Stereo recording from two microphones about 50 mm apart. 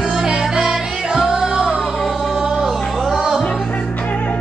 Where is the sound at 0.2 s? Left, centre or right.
Centre.